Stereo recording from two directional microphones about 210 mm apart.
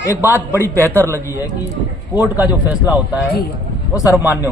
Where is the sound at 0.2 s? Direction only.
10° right (ahead or behind).